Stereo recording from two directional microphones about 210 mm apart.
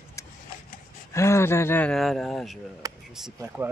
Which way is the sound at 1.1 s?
15° left (ahead or behind).